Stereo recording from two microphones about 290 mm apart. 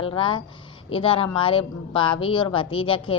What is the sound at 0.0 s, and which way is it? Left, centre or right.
Speech, centre.